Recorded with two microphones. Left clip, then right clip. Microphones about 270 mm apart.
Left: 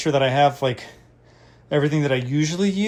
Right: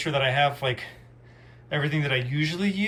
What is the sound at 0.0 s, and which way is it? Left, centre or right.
Speech, left.